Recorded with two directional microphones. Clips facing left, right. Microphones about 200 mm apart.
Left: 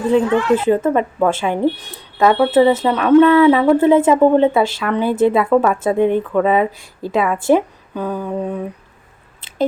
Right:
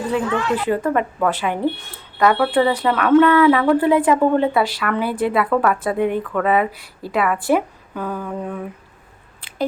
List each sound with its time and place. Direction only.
0.1 s speech: 25° left (ahead or behind)
9.4 s biting: 20° left (ahead or behind)